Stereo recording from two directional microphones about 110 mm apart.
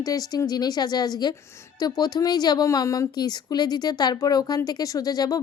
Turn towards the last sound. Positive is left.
turn(degrees=35)  # may be behind; listen again after turning